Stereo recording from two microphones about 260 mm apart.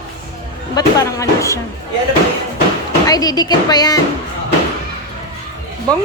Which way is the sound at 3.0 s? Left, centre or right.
Centre.